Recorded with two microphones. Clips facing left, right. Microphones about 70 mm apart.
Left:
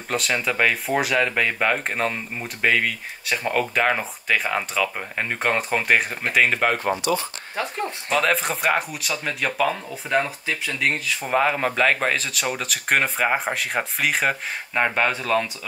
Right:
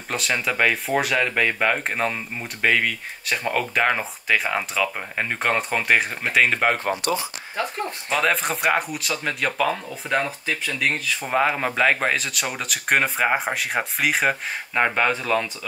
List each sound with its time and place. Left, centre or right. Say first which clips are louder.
0.1 s speech: left 1 dB; centre
7.0 s speech: left 1 dB; right
8.1 s speech: even; centre